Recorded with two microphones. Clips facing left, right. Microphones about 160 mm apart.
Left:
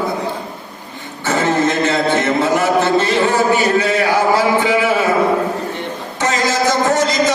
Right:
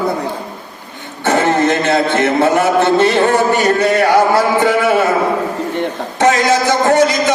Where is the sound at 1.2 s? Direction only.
60° right (ahead or behind).